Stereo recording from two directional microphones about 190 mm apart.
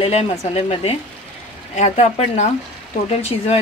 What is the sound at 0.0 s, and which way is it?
Speech, 35° left (ahead or behind).